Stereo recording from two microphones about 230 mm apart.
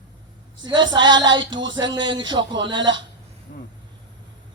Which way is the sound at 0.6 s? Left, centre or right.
Centre.